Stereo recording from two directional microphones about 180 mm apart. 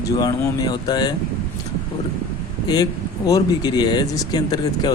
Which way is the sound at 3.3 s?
20° left (ahead or behind).